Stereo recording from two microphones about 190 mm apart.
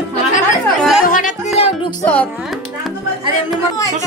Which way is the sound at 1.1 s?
45° left (ahead or behind).